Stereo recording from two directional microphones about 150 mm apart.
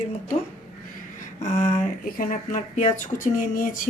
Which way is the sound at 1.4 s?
55° left (ahead or behind).